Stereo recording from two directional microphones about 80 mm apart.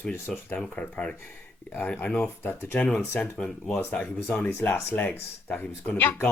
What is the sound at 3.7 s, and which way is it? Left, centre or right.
Speech, left.